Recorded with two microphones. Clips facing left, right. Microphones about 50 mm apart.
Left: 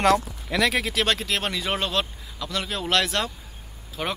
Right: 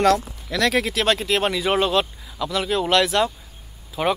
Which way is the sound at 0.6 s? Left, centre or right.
Centre.